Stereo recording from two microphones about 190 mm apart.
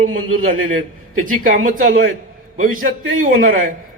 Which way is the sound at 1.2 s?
45° right (ahead or behind).